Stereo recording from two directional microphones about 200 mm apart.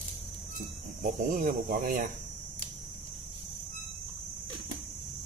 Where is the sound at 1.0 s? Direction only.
45° right (ahead or behind).